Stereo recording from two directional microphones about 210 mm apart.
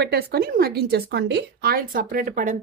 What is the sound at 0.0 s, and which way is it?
A woman's voice, 50° right (ahead or behind).